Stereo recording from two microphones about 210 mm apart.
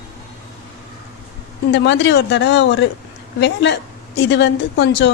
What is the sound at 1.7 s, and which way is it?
Speech, 55° left (ahead or behind).